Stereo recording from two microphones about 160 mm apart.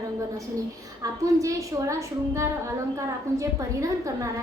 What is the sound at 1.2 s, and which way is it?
A woman's voice, 20° right (ahead or behind).